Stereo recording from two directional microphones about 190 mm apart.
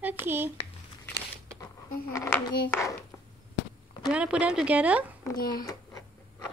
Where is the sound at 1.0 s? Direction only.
10° left (ahead or behind).